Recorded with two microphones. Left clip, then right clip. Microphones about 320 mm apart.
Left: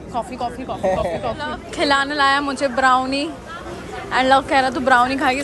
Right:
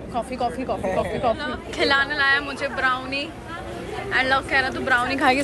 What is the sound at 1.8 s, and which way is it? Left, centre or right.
A woman's voice, centre.